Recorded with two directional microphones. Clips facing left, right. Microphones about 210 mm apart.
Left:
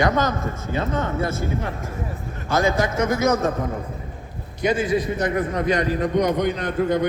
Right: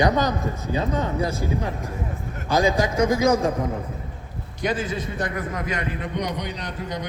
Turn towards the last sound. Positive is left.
turn(degrees=55)  # may be behind; listen again after turning